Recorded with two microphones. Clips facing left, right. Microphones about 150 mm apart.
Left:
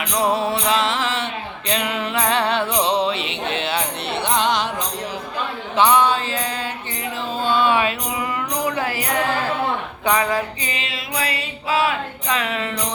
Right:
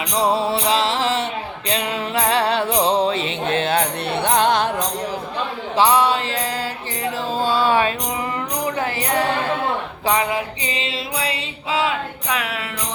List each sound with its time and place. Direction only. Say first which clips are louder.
0.2 s music: right 1 dB; 30° right (ahead or behind)
2.8 s music: right 2 dB; 45° right (ahead or behind)
5.7 s mantra: even; 30° right (ahead or behind)
7.3 s a sound: even; 35° right (ahead or behind)
8.7 s music: right 1 dB; 30° right (ahead or behind)
12.3 s music: left 2 dB; 5° right (ahead or behind)